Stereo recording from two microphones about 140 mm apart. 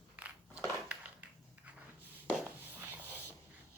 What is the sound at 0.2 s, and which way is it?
Crushing, 10° right (ahead or behind).